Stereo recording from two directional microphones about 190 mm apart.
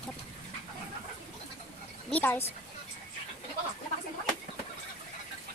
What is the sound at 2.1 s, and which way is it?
Speech, 10° left (ahead or behind).